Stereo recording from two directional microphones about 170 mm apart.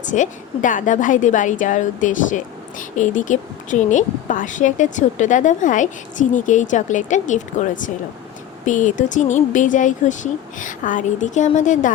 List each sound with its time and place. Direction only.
0.0 s a woman's voice: 45° left (ahead or behind)